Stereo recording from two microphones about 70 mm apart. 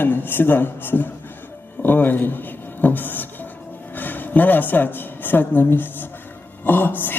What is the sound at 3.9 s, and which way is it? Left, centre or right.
A woman's voice, left.